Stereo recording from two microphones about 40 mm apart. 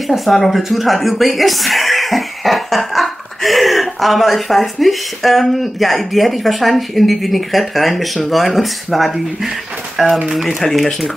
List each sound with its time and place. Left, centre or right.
0.1 s speech: centre